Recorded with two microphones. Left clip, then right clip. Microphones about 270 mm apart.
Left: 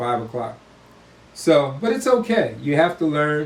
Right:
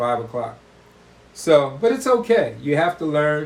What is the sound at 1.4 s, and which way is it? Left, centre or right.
Speech, centre.